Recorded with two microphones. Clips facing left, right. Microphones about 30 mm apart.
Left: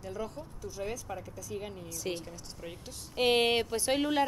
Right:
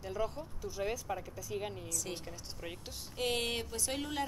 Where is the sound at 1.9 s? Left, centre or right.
Left.